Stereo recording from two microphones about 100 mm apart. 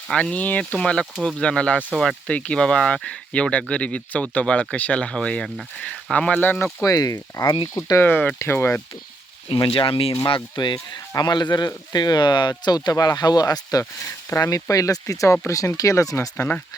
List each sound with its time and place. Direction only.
0.1 s speech: 10° left (ahead or behind)
1.1 s speech: 10° right (ahead or behind)
1.4 s speech: 10° left (ahead or behind)
6.8 s speech: 35° left (ahead or behind)
7.4 s speech: 50° left (ahead or behind)
7.7 s speech: 35° left (ahead or behind)
8.0 s speech: 15° left (ahead or behind)
9.5 s speech: 65° left (ahead or behind); by 16.3 s 35° left (ahead or behind)